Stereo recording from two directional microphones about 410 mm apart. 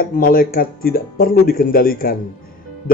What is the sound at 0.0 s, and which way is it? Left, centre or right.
A man's voice, left.